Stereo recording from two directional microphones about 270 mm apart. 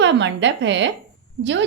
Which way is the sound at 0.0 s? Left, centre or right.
Right.